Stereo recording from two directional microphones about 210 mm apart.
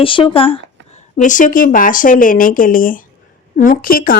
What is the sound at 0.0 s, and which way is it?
Speech, 25° left (ahead or behind).